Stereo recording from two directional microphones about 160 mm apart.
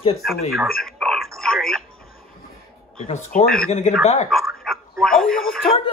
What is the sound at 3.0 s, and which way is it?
A man's voice, 50° left (ahead or behind).